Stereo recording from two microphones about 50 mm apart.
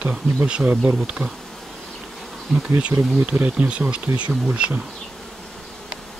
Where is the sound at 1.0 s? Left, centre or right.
Right.